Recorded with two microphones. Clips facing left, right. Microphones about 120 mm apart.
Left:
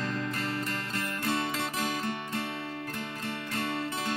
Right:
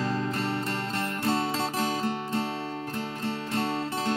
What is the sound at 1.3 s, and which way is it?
Music, 30° right (ahead or behind).